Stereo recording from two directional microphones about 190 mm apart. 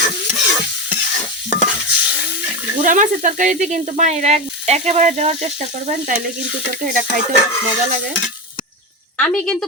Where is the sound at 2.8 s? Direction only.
40° right (ahead or behind).